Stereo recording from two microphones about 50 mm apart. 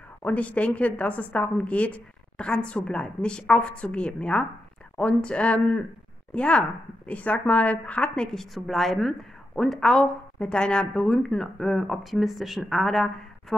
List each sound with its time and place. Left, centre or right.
0.2 s a woman's voice: left
8.5 s a woman's voice: centre